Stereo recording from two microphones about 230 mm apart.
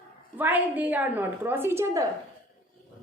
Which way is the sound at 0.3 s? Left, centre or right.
Centre.